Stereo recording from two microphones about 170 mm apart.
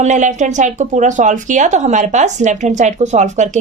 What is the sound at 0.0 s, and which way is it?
Speech, 45° right (ahead or behind).